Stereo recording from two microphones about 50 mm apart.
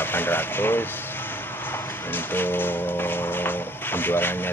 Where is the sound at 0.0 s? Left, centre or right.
Left.